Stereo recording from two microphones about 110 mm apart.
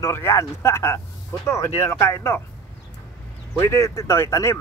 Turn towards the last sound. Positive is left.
turn(degrees=25)  # may be behind; listen again after turning